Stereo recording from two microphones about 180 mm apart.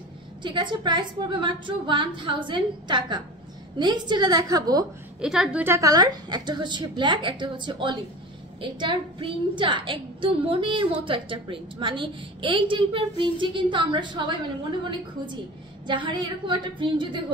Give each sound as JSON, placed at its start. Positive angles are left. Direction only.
{"t": 0.4, "sound": "a woman's voice", "side_deg": -25}
{"t": 5.2, "sound": "a woman's voice", "side_deg": -5}
{"t": 15.9, "sound": "a woman's voice", "side_deg": -25}